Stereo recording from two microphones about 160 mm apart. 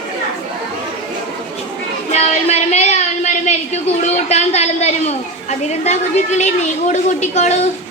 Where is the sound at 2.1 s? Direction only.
40° left (ahead or behind).